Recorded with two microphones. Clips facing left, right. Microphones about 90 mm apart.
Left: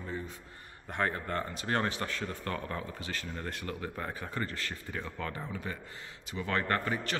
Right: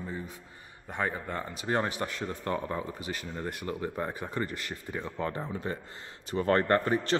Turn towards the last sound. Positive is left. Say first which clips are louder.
# right 6 dB
turn(degrees=-30)  # may be behind; listen again after turning